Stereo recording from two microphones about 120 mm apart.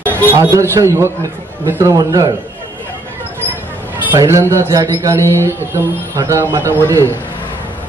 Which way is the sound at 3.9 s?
25° right (ahead or behind).